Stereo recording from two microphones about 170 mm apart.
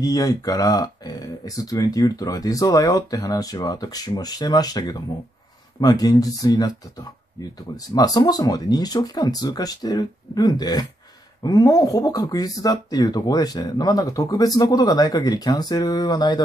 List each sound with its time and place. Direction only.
0.0 s speech: 20° left (ahead or behind)
7.7 s speech: 20° left (ahead or behind)